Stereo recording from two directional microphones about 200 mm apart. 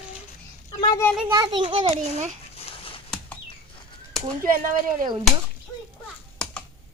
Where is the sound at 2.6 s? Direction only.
25° left (ahead or behind).